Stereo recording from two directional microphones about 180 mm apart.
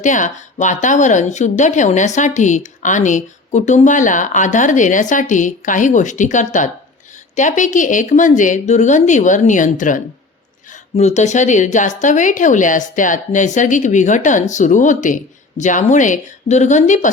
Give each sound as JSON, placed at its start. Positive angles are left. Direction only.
{"t": 0.0, "sound": "speech", "side_deg": 45}